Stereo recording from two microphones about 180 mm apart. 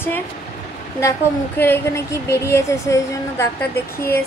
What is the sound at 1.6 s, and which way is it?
A woman's voice, 15° left (ahead or behind).